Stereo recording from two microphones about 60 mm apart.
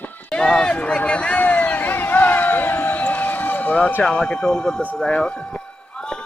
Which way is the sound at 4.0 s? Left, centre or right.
Centre.